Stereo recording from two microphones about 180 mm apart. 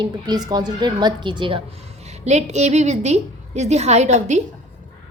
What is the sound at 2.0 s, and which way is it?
A woman's voice, 40° right (ahead or behind).